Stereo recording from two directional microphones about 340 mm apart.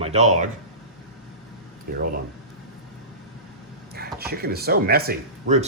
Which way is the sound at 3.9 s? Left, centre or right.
Right.